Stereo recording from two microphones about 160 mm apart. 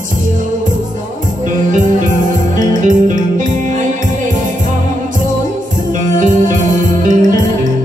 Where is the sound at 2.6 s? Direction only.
55° right (ahead or behind).